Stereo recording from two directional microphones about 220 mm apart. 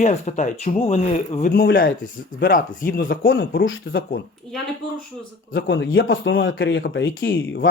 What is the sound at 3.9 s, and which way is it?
Speech, 60° left (ahead or behind).